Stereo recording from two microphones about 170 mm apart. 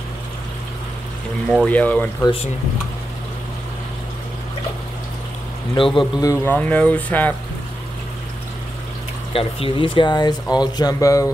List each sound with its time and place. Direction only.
1.5 s speech: 5° left (ahead or behind)
5.9 s speech: 20° left (ahead or behind)
9.3 s speech: 35° left (ahead or behind)